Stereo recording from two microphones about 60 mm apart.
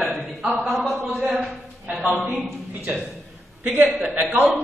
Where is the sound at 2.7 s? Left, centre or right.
Right.